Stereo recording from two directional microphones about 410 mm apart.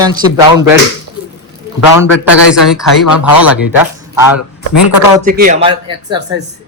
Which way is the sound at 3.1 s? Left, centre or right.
Left.